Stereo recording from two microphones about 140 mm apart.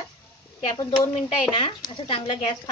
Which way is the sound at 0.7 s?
25° left (ahead or behind).